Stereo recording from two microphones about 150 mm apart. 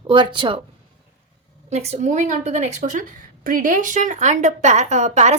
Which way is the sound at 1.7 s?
45° right (ahead or behind).